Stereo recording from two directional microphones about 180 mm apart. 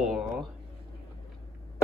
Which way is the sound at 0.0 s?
Centre (ahead or behind).